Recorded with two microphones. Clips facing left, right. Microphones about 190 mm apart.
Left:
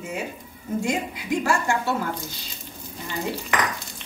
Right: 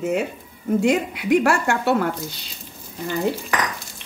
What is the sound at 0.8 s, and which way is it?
A woman's voice, 65° right (ahead or behind).